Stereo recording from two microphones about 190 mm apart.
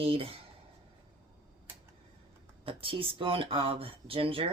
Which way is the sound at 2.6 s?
30° right (ahead or behind).